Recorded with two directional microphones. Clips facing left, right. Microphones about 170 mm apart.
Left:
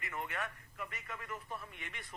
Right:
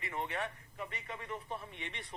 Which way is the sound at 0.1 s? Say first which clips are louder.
Right 3 dB; 30° right (ahead or behind).